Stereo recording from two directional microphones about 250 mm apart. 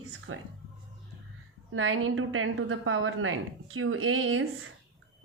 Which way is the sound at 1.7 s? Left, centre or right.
Right.